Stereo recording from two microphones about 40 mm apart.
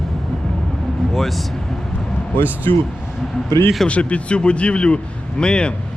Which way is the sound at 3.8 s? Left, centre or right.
Left.